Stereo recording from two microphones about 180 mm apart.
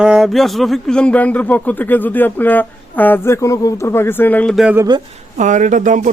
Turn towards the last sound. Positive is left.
turn(degrees=-45)  # may be behind; listen again after turning